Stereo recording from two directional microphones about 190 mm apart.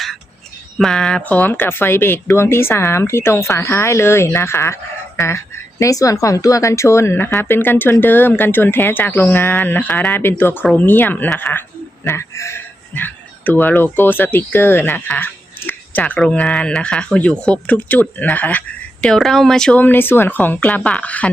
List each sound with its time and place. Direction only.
0.8 s speech: 5° left (ahead or behind)